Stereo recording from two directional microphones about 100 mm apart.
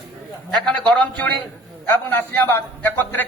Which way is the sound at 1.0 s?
15° left (ahead or behind).